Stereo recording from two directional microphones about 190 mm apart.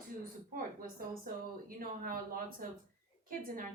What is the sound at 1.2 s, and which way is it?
A woman's voice, 50° right (ahead or behind).